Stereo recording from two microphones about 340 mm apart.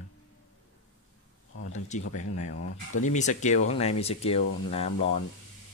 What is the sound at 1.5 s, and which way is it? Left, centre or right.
Speech, left.